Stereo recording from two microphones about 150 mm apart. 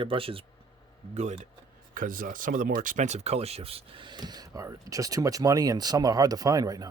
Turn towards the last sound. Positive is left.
turn(degrees=-25)  # may be behind; listen again after turning